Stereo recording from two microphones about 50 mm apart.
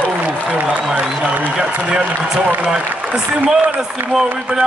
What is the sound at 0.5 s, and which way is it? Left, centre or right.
Applause, right.